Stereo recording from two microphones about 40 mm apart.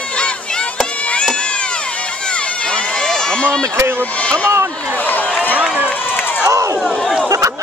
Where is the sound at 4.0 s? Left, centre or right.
Left.